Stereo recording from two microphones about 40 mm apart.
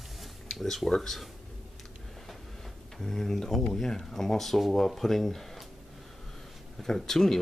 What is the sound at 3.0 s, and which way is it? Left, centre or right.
Speech, centre.